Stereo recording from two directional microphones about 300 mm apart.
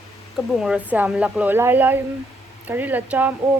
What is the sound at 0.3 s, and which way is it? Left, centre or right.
Speech, centre.